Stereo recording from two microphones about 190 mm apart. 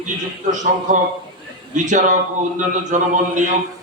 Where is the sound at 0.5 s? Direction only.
40° right (ahead or behind).